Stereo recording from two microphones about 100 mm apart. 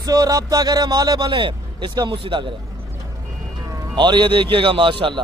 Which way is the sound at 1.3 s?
55° right (ahead or behind).